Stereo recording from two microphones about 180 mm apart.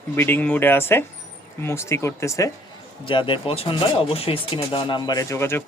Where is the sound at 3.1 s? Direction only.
25° left (ahead or behind).